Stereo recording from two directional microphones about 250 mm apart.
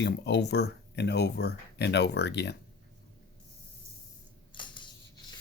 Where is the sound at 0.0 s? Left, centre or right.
Left.